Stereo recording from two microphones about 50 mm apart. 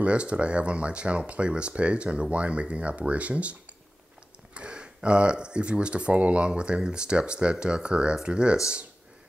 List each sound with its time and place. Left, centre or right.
0.0 s speech: right
4.6 s speech: right